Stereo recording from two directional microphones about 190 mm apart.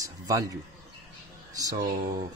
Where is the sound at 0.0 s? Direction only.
20° right (ahead or behind).